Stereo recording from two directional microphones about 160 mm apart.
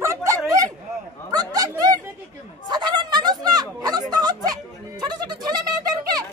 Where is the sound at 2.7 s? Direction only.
25° right (ahead or behind).